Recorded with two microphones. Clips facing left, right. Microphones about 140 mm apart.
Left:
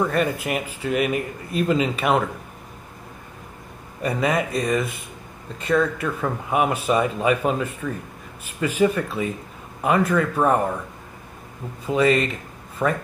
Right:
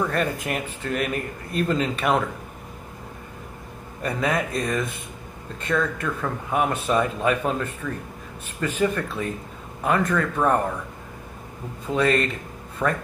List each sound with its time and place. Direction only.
0.0 s speech: 5° left (ahead or behind)
4.0 s speech: 5° left (ahead or behind)
11.9 s speech: 5° left (ahead or behind)